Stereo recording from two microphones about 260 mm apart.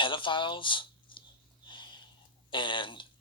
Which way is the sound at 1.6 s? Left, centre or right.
Centre.